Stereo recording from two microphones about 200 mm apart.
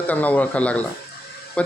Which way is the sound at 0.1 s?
10° left (ahead or behind).